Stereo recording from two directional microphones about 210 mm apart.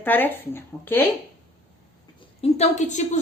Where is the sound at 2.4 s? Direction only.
30° left (ahead or behind).